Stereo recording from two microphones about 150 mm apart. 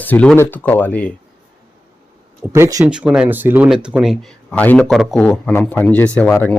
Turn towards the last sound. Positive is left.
turn(degrees=10)  # may be behind; listen again after turning